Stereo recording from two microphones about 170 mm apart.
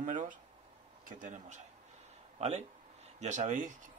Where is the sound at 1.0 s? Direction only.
45° right (ahead or behind).